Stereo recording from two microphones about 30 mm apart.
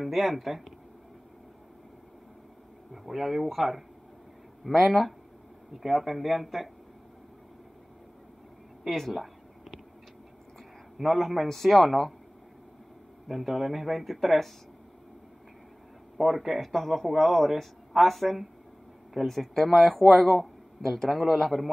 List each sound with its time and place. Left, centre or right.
0.0 s a man's voice: centre
2.9 s a man's voice: centre
4.6 s speech: centre
5.8 s a man's voice: centre
9.1 s a sound: centre
11.0 s a man's voice: centre
11.4 s a man's voice: centre
13.3 s a man's voice: centre
16.2 s a man's voice: centre